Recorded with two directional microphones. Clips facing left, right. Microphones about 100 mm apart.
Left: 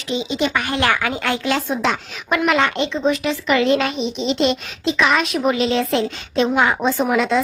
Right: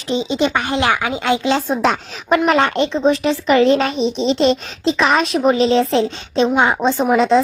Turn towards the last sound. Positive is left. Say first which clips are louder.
# right 4 dB
turn(degrees=-25)  # may be behind; listen again after turning